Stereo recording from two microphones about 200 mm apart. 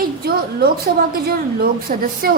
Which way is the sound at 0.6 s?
50° right (ahead or behind).